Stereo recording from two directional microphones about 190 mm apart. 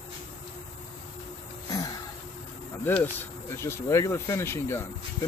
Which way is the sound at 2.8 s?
10° left (ahead or behind).